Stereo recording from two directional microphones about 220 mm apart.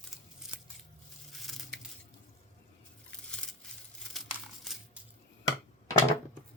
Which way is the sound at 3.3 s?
5° left (ahead or behind).